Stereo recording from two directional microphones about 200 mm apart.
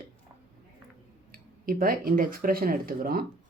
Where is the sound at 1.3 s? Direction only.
45° right (ahead or behind).